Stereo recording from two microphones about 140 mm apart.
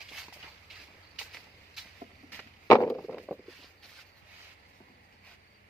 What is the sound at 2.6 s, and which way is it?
Walk, 20° left (ahead or behind).